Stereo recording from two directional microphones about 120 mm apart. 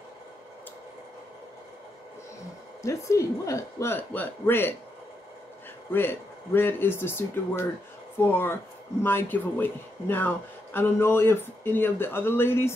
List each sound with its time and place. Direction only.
2.8 s a woman's voice: 25° left (ahead or behind)
5.9 s speech: 20° left (ahead or behind)